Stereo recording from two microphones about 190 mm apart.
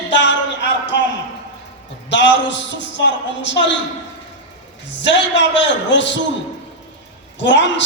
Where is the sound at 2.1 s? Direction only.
70° left (ahead or behind).